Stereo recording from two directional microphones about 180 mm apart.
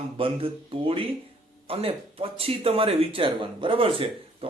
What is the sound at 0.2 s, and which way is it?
A man's voice, 30° right (ahead or behind).